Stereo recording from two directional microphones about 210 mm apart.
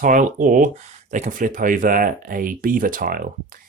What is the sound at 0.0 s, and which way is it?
Speech, 40° right (ahead or behind).